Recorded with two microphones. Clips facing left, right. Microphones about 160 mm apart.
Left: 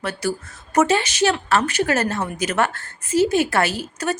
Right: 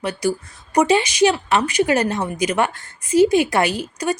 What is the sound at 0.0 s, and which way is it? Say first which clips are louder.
A woman's voice: right 3 dB; 15° right (ahead or behind).